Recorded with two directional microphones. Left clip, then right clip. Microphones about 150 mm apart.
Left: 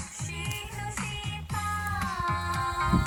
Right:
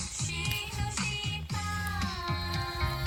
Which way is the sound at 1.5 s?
30° left (ahead or behind).